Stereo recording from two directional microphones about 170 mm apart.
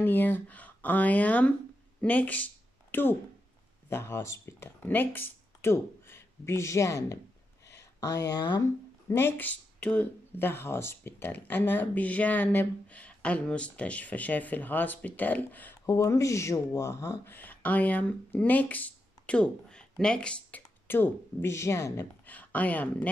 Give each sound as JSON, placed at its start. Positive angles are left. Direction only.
{"t": 0.0, "sound": "speech", "side_deg": 10}
{"t": 8.3, "sound": "speech", "side_deg": 25}
{"t": 9.1, "sound": "speech", "side_deg": 10}